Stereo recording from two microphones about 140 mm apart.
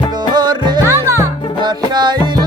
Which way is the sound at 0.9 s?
20° right (ahead or behind).